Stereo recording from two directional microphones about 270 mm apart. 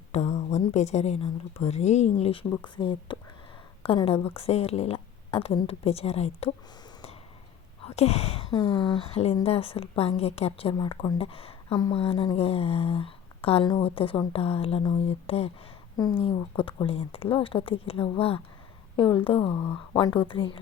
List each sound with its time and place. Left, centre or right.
0.1 s a woman's voice: left
7.9 s a woman's voice: left